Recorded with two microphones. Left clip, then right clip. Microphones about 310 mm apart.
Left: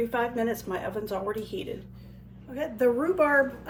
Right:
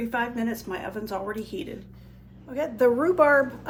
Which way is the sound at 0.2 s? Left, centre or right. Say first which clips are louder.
Left 1 dB; centre.